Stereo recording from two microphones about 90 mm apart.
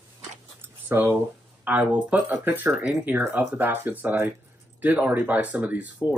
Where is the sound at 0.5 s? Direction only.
20° right (ahead or behind).